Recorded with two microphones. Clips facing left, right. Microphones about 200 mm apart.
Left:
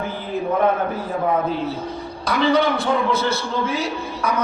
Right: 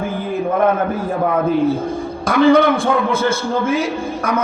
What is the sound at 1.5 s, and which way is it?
A man's voice, 45° right (ahead or behind).